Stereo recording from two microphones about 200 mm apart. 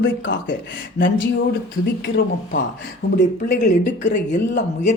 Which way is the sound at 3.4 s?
40° left (ahead or behind).